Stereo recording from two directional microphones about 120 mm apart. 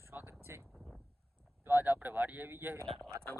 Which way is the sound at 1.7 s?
15° right (ahead or behind).